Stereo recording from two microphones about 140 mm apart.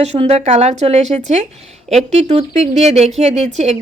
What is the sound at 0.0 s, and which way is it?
Speech, 50° right (ahead or behind).